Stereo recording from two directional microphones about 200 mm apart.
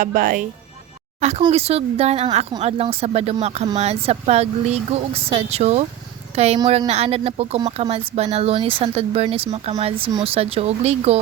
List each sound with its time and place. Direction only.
0.0 s a woman's voice: 45° right (ahead or behind)